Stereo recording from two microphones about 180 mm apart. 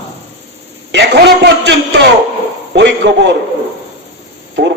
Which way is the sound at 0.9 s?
70° right (ahead or behind).